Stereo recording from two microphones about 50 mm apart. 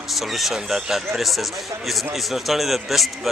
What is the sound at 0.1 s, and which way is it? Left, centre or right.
A man's voice, centre.